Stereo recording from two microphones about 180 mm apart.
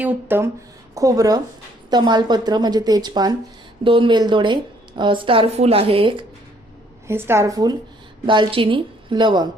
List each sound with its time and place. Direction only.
0.0 s a woman's voice: 10° right (ahead or behind); by 6.2 s 30° right (ahead or behind)
7.1 s a woman's voice: 15° right (ahead or behind)